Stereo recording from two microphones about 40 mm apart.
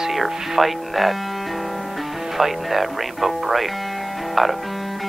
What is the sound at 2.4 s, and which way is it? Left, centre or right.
Speech, centre.